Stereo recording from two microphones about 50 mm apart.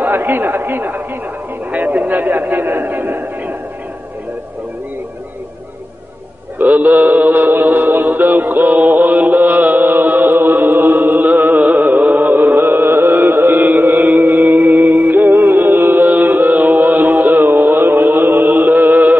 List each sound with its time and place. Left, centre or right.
0.0 s a man's voice: right
1.7 s a sound: right
6.6 s mantra: right
16.2 s music: right